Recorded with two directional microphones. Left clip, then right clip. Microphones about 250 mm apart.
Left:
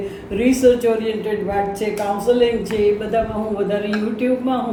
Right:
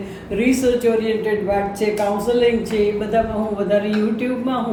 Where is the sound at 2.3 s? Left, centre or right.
Centre.